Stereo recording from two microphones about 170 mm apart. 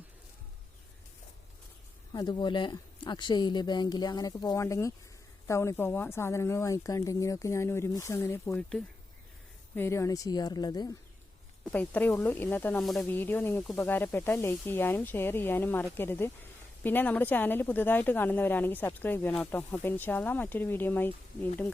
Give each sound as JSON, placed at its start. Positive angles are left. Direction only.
{"t": 2.1, "sound": "speech", "side_deg": 25}
{"t": 9.7, "sound": "speech", "side_deg": 15}
{"t": 11.6, "sound": "speech", "side_deg": 10}